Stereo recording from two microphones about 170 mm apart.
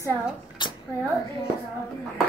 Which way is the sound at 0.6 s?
25° left (ahead or behind).